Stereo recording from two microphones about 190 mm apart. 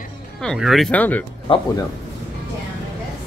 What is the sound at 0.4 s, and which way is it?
Speech, centre (ahead or behind).